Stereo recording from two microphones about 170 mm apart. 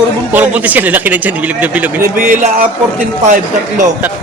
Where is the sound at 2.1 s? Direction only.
50° right (ahead or behind).